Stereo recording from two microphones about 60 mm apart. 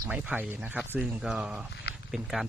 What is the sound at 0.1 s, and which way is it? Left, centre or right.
Speech, right.